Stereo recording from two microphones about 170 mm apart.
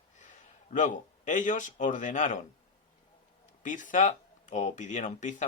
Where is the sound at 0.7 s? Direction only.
50° left (ahead or behind).